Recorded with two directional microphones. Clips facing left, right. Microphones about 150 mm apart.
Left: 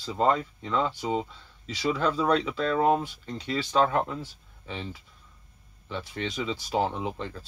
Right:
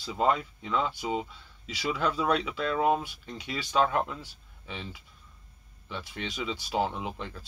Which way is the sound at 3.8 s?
35° left (ahead or behind).